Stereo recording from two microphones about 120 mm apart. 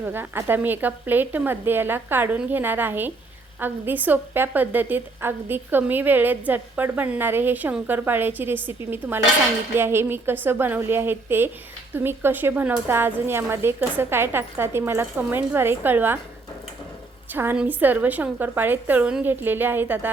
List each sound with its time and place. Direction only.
0.0 s a woman's voice: 15° right (ahead or behind)
17.3 s a woman's voice: 15° right (ahead or behind)